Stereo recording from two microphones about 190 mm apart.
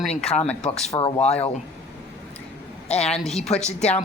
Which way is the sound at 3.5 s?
35° left (ahead or behind).